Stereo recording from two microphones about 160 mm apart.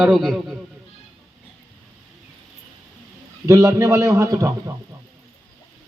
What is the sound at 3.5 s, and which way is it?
A man's voice, 15° right (ahead or behind).